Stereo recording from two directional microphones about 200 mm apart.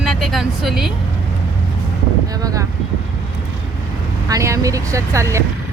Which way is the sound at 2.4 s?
15° right (ahead or behind).